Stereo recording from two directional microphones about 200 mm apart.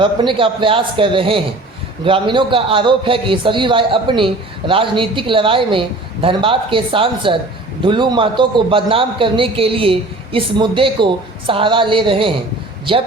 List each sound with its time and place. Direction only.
0.0 s a man's voice: 25° right (ahead or behind)